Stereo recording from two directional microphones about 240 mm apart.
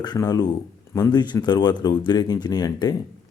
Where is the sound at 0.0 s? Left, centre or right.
Centre.